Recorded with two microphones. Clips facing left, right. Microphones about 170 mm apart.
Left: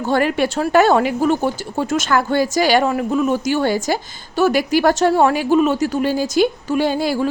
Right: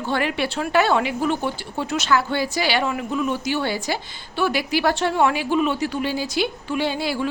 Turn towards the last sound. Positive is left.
turn(degrees=45)  # may be behind; listen again after turning